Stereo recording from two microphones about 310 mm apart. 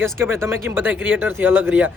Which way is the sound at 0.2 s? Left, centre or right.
Centre.